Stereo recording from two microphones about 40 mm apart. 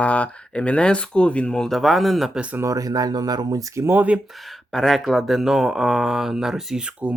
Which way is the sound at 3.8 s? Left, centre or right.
Right.